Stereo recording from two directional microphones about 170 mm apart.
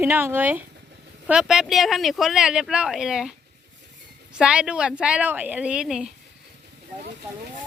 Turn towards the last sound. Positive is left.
turn(degrees=-5)  # may be behind; listen again after turning